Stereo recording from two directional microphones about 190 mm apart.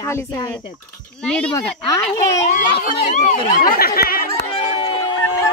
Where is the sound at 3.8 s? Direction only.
50° left (ahead or behind).